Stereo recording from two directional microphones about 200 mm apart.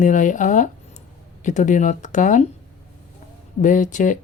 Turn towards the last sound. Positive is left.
turn(degrees=40)  # may be behind; listen again after turning